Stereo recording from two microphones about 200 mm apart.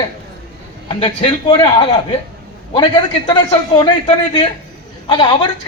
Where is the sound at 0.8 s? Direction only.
25° left (ahead or behind).